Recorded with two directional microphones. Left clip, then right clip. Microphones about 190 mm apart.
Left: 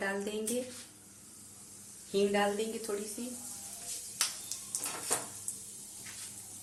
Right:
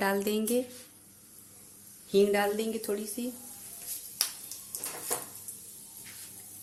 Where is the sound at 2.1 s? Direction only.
55° right (ahead or behind).